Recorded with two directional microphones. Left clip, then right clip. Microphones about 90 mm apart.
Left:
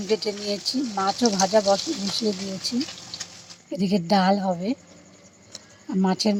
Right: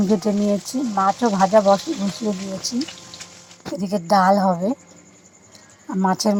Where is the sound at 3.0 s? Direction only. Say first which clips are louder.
Left 2 dB; 30° right (ahead or behind).